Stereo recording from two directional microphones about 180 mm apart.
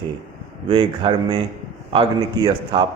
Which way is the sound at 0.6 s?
30° right (ahead or behind).